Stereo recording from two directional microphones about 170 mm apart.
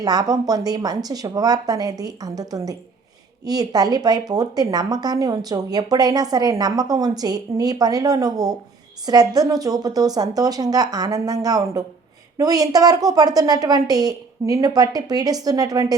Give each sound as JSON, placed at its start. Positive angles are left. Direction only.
{"t": 0.0, "sound": "speech", "side_deg": -20}